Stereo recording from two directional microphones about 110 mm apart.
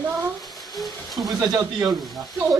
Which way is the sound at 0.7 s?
Centre (ahead or behind).